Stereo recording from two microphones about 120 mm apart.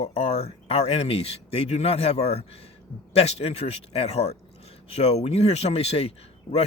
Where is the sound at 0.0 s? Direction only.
55° left (ahead or behind).